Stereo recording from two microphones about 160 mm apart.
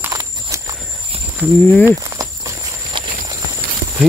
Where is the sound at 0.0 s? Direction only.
20° right (ahead or behind).